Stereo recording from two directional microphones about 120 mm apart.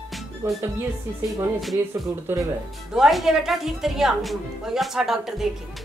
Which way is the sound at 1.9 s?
25° right (ahead or behind).